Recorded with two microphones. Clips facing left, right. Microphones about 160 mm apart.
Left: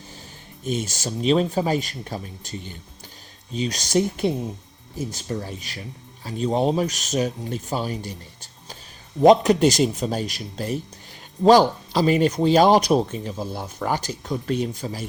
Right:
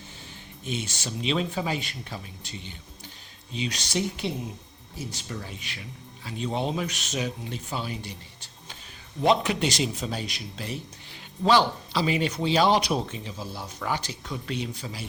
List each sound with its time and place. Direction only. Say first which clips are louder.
0.6 s speech: left 6 dB; 45° left (ahead or behind)